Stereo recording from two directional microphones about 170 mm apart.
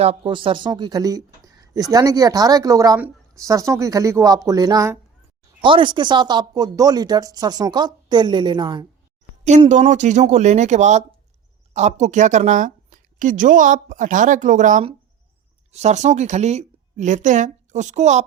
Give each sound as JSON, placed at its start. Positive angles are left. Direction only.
{"t": 0.0, "sound": "speech", "side_deg": -35}
{"t": 9.6, "sound": "a woman's voice", "side_deg": -45}